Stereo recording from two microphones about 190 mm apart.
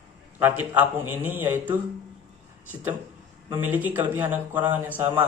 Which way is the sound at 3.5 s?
10° right (ahead or behind).